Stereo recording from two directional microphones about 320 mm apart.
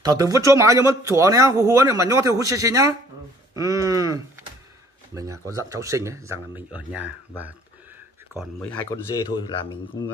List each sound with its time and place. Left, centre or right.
0.0 s speech: centre
9.1 s speech: centre